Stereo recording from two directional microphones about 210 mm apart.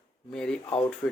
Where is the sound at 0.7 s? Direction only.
25° left (ahead or behind).